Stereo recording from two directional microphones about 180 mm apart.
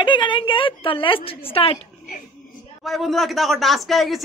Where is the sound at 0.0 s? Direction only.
25° left (ahead or behind).